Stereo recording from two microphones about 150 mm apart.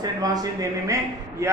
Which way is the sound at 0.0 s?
25° right (ahead or behind).